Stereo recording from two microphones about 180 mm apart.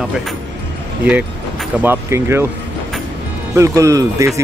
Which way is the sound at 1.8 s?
15° right (ahead or behind).